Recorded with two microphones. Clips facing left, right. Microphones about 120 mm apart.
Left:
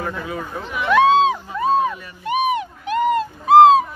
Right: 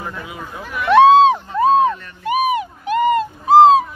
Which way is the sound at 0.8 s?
30° right (ahead or behind).